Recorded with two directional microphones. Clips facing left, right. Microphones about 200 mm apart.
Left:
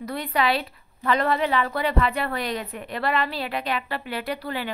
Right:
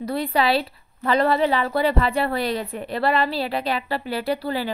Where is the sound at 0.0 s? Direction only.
30° right (ahead or behind).